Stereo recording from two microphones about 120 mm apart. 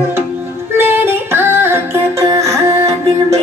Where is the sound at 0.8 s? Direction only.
20° right (ahead or behind).